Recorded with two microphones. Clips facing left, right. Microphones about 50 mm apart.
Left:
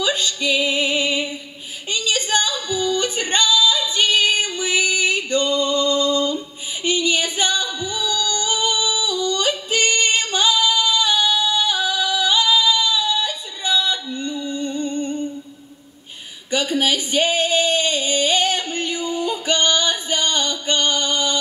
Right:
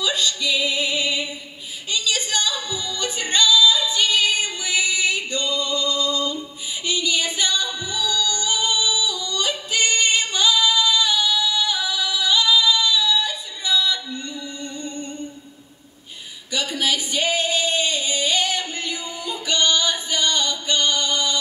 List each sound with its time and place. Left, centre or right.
0.0 s music: left
1.9 s a sound: left
2.7 s music: left
7.3 s singing: left
7.9 s yodeling: left
16.4 s female singing: left
19.0 s music: left